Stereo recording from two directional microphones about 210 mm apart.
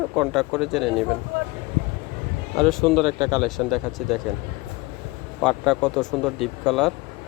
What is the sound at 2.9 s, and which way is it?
Speech, 25° right (ahead or behind).